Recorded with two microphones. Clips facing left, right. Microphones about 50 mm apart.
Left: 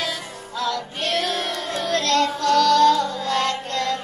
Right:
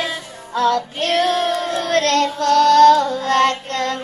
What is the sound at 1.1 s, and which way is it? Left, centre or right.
Child singing, right.